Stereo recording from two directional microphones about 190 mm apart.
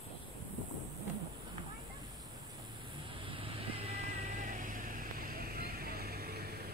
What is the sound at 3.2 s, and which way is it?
Vehicle, 30° right (ahead or behind).